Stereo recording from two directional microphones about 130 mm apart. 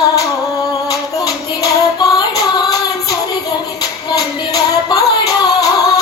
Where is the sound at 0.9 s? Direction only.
25° left (ahead or behind).